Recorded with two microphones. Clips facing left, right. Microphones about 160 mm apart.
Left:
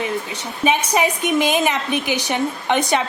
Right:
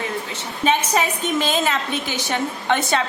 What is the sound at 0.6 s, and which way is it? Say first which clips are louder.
A woman's voice: left 2 dB; 10° left (ahead or behind).